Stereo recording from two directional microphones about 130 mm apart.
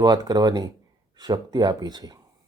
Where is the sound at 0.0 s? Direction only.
30° right (ahead or behind).